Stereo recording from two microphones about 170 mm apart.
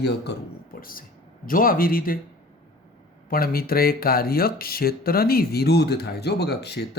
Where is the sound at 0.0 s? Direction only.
80° left; by 2.1 s 55° left (ahead or behind).